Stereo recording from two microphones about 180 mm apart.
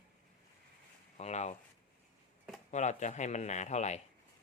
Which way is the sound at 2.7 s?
40° left (ahead or behind).